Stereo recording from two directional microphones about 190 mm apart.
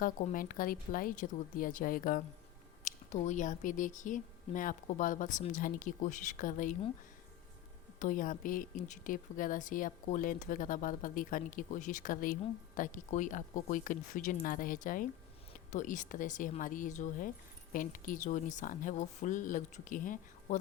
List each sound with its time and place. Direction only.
0.0 s a woman's voice: 45° left (ahead or behind)
7.9 s a woman's voice: 45° left (ahead or behind)